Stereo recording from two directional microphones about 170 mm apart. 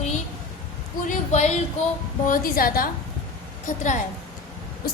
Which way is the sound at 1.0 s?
45° left (ahead or behind).